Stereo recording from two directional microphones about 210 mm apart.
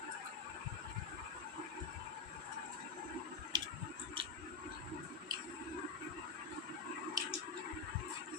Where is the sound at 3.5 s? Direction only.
20° right (ahead or behind).